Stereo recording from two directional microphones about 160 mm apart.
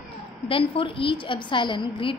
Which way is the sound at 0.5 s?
35° left (ahead or behind).